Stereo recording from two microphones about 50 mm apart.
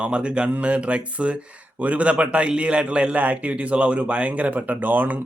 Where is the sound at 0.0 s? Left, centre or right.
Right.